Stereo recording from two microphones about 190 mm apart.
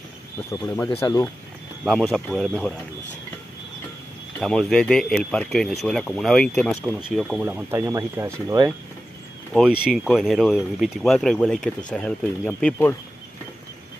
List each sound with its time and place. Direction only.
0.5 s speech: 10° left (ahead or behind)
1.9 s speech: centre (ahead or behind)
4.4 s speech: centre (ahead or behind)
7.1 s speech: 5° right (ahead or behind)
9.5 s speech: centre (ahead or behind)